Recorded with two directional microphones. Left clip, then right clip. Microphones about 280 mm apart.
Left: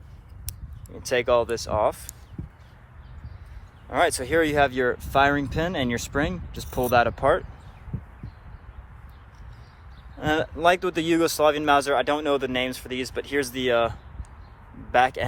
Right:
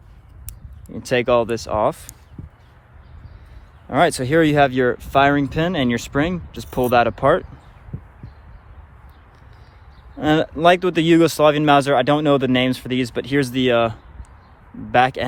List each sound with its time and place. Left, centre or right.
1.0 s speech: right
3.9 s speech: right
10.2 s speech: right